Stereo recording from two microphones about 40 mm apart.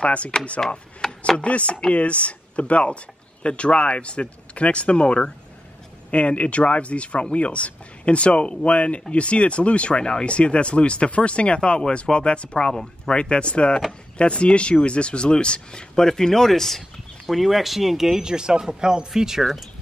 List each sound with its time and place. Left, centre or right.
0.0 s speech: left
1.0 s chopping: centre
1.4 s speech: left; by 13.2 s centre
13.2 s speech: left; by 18.2 s centre
18.2 s speech: centre